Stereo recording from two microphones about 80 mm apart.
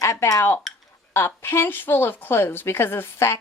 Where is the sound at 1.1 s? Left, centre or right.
Left.